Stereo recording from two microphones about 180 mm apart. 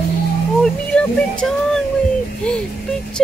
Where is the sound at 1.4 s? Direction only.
Centre (ahead or behind).